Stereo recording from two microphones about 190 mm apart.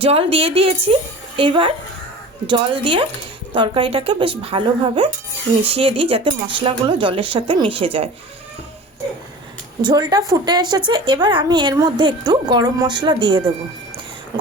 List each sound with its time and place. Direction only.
0.0 s a woman's voice: 30° right (ahead or behind)
9.8 s a woman's voice: 20° right (ahead or behind)